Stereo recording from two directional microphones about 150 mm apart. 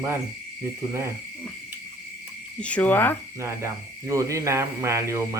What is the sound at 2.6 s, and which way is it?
Speech, 10° left (ahead or behind).